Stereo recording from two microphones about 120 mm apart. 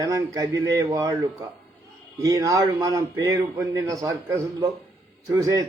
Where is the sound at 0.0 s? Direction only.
30° right (ahead or behind).